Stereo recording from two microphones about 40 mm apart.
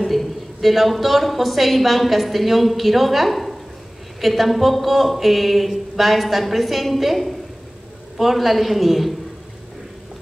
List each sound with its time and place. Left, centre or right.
0.0 s a woman's voice: centre